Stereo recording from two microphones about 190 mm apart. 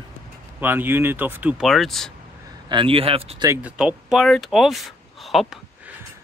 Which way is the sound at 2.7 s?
30° right (ahead or behind).